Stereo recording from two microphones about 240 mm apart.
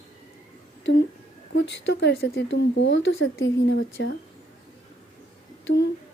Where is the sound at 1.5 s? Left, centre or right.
Left.